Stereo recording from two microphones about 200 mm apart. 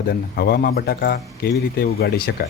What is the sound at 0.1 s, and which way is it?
Speech, 50° left (ahead or behind).